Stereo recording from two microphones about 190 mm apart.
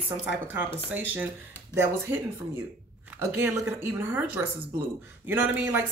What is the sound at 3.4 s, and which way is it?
Speech, 15° right (ahead or behind).